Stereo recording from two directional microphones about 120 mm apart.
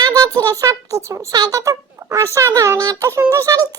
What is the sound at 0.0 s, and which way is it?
Speech, 30° right (ahead or behind).